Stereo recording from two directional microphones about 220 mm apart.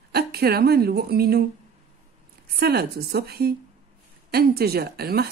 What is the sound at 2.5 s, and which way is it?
A woman's voice, 45° right (ahead or behind).